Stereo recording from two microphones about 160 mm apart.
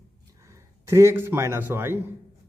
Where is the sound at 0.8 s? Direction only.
15° right (ahead or behind).